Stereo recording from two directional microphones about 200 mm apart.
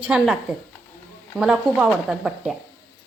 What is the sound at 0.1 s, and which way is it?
Speech, 5° right (ahead or behind).